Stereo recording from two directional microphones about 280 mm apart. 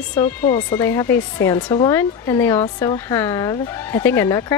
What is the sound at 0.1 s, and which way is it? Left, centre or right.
Speech, centre.